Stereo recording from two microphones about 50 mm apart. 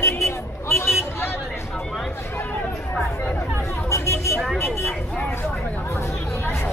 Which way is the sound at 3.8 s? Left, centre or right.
Left.